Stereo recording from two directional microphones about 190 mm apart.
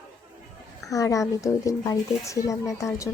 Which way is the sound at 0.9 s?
15° left (ahead or behind).